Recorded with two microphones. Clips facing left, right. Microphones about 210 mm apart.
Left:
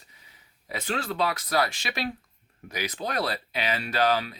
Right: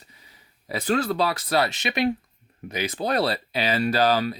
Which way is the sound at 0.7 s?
40° right (ahead or behind).